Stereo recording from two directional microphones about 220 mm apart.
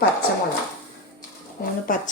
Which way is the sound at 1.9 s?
35° left (ahead or behind).